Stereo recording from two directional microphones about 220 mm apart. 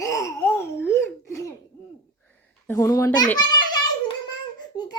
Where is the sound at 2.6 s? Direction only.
10° left (ahead or behind).